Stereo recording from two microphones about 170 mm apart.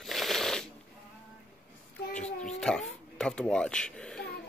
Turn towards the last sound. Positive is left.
turn(degrees=5)  # may be behind; listen again after turning